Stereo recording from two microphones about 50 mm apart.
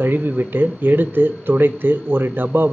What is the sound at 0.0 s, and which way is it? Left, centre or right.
Speech, right.